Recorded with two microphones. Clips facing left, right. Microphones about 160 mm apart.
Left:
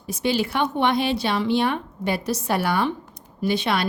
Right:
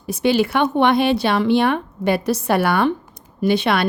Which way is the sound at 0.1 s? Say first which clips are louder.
Right 6 dB; 60° right (ahead or behind).